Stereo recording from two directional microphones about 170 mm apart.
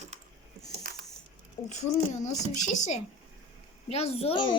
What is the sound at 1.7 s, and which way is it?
A woman's voice, 45° left (ahead or behind).